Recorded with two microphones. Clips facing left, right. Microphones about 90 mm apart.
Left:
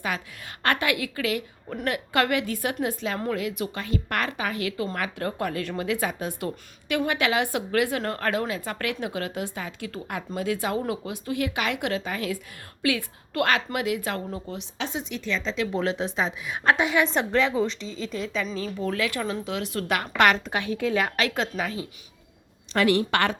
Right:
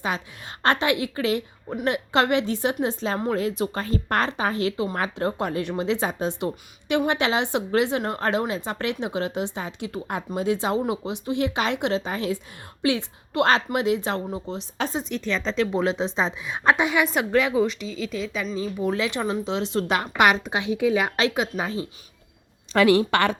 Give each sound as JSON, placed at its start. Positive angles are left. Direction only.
{"t": 0.0, "sound": "a woman's voice", "side_deg": -25}
{"t": 14.8, "sound": "speech", "side_deg": -40}
{"t": 15.7, "sound": "a woman's voice", "side_deg": -20}
{"t": 18.5, "sound": "a woman's voice", "side_deg": -15}
{"t": 21.6, "sound": "speech", "side_deg": -25}